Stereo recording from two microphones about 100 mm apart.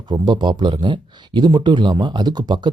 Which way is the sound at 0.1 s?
50° right (ahead or behind).